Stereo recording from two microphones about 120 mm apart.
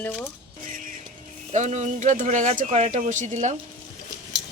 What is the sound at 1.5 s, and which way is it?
Speech, 75° right (ahead or behind).